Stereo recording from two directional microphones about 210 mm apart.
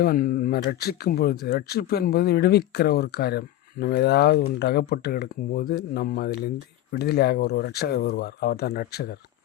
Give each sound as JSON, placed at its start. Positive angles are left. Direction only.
{"t": 0.0, "sound": "speech", "side_deg": 45}